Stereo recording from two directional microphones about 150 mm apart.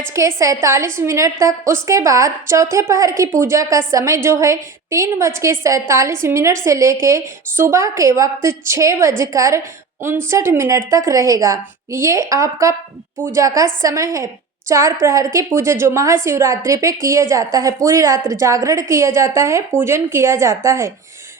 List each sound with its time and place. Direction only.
0.1 s a woman's voice: 20° right (ahead or behind)